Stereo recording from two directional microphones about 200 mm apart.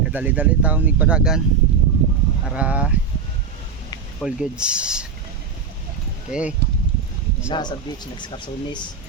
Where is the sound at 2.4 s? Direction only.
5° right (ahead or behind).